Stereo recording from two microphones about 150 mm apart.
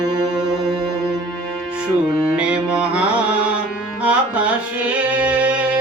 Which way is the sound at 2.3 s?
10° right (ahead or behind).